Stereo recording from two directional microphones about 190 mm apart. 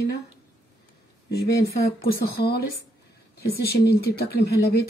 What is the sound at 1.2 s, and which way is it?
Speech, 55° left (ahead or behind).